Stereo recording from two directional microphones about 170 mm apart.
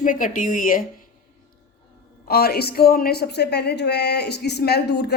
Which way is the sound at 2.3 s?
65° left (ahead or behind).